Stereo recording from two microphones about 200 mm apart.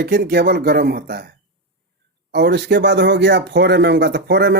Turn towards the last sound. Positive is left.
turn(degrees=-60)  # may be behind; listen again after turning